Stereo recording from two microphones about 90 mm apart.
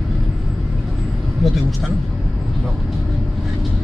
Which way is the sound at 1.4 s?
Centre (ahead or behind).